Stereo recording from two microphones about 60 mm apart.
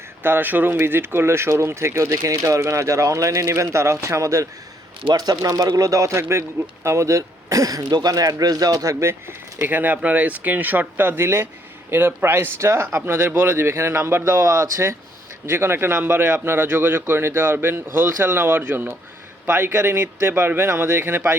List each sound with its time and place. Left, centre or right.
0.2 s speech: right
5.1 s speech: right
9.0 s a man's voice: right